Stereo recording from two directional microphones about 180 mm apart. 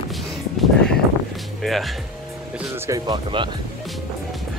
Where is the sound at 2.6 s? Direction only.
15° right (ahead or behind).